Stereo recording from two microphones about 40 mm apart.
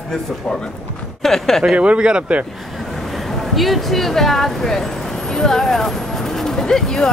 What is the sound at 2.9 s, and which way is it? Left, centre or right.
Speech, centre.